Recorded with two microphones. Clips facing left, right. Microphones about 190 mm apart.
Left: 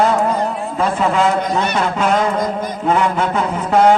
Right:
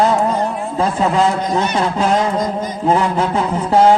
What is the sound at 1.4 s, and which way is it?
Speech, 55° left (ahead or behind).